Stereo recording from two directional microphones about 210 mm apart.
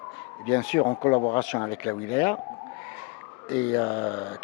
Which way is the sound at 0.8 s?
20° left (ahead or behind).